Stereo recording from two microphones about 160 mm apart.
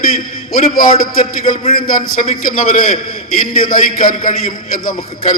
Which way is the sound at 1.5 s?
55° left (ahead or behind).